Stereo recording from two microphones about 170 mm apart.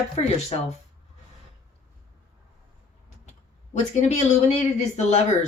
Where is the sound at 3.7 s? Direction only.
40° left (ahead or behind).